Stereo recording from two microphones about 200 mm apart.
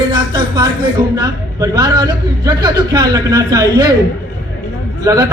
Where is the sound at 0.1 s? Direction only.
20° right (ahead or behind).